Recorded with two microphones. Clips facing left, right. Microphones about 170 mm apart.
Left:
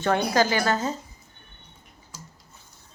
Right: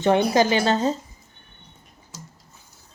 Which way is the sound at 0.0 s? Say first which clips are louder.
Right 4 dB; 20° right (ahead or behind).